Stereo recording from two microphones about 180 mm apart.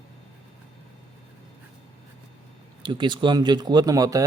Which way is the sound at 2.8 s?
25° right (ahead or behind).